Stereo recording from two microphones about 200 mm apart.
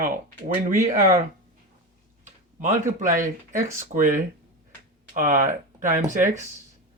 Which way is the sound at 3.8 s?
40° right (ahead or behind).